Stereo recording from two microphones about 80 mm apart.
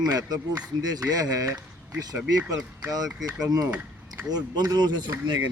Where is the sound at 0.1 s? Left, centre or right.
Right.